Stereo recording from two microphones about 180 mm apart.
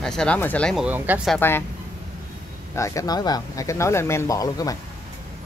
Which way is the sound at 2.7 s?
15° left (ahead or behind).